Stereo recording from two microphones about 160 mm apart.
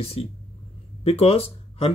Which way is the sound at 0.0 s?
40° left (ahead or behind).